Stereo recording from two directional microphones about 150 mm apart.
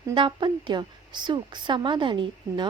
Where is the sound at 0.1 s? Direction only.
35° right (ahead or behind).